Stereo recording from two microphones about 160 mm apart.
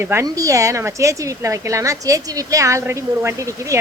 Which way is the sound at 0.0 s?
15° right (ahead or behind).